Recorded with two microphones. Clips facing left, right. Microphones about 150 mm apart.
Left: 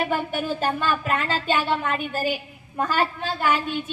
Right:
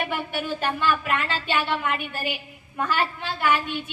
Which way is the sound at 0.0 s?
40° left (ahead or behind).